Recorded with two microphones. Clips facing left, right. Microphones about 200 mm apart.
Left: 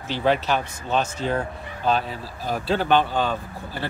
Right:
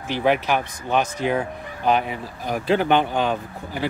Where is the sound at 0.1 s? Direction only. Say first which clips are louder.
Right 1 dB; 15° right (ahead or behind).